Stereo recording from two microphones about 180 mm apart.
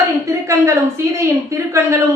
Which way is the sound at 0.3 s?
15° right (ahead or behind).